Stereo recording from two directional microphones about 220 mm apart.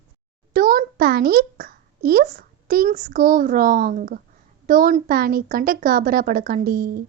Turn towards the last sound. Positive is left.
turn(degrees=-40)  # may be behind; listen again after turning